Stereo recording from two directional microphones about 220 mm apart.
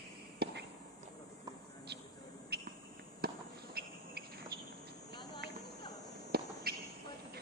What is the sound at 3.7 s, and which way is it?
Cricket, 45° right (ahead or behind).